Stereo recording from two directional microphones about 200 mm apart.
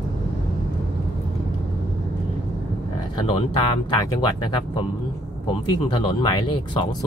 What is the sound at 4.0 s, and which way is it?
Speech, 20° left (ahead or behind).